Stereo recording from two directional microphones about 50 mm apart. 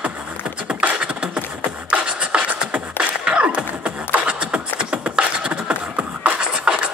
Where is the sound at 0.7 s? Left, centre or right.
Right.